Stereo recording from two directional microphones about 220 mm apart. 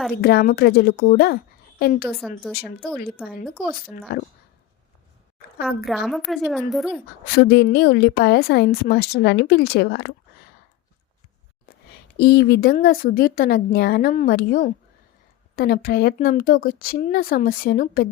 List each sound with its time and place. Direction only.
0.2 s a woman's voice: 45° left (ahead or behind)
4.1 s a woman's voice: 45° left (ahead or behind)
5.6 s a woman's voice: centre (ahead or behind)
7.3 s a woman's voice: 45° left (ahead or behind)
12.1 s a woman's voice: 45° left (ahead or behind)